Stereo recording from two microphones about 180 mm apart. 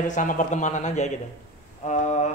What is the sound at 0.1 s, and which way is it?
A woman's voice, 45° left (ahead or behind).